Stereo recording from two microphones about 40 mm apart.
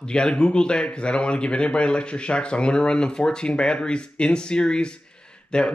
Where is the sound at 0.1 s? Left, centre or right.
Left.